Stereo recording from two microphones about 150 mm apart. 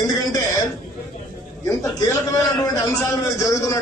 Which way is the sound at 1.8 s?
20° left (ahead or behind).